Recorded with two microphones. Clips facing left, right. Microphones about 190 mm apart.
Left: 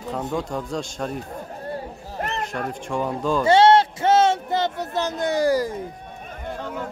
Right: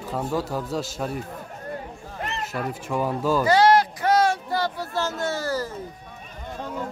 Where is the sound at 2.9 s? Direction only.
5° right (ahead or behind).